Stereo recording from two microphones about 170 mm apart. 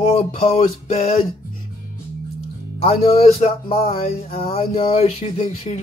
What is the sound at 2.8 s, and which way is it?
Speech, 35° left (ahead or behind).